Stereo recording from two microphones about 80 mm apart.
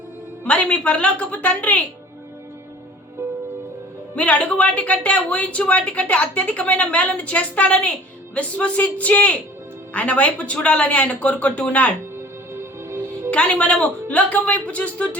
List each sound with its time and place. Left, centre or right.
0.4 s speech: centre
4.1 s speech: centre
13.3 s speech: centre